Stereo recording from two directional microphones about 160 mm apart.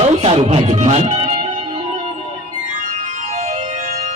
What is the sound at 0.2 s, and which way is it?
Speech, 40° right (ahead or behind).